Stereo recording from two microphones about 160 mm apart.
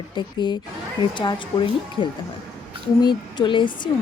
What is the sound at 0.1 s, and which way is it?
Speech, 30° left (ahead or behind).